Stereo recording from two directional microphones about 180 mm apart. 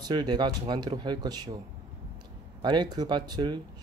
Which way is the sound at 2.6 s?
25° right (ahead or behind).